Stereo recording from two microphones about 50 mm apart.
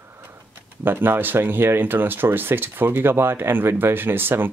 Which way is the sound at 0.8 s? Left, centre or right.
Right.